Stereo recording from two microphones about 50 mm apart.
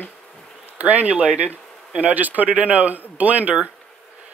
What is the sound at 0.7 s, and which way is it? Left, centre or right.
A man's voice, right.